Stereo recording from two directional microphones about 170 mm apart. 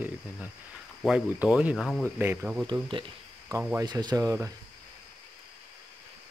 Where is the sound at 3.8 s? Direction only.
25° right (ahead or behind).